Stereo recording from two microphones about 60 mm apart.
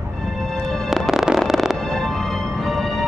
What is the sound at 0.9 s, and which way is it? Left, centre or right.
Music, centre.